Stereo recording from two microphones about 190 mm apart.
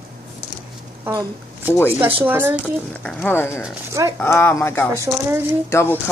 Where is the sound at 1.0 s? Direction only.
15° right (ahead or behind).